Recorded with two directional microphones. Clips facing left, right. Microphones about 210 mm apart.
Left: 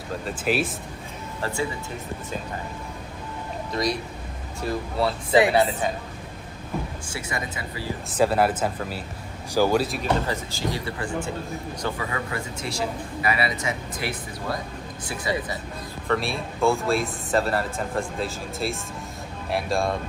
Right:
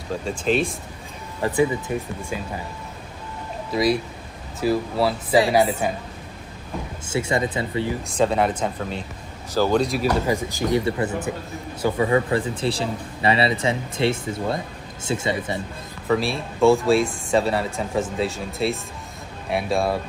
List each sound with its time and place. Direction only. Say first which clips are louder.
0.1 s speech: right 3 dB; 5° left (ahead or behind)
1.4 s speech: right 8 dB; 15° right (ahead or behind)
3.7 s speech: right 6 dB; 5° right (ahead or behind)
7.1 s speech: right 9 dB; 25° right (ahead or behind)
8.1 s speech: left 1 dB; 5° left (ahead or behind)
10.2 s speech: right 5 dB; 15° right (ahead or behind)
16.1 s speech: right 4 dB; centre (ahead or behind)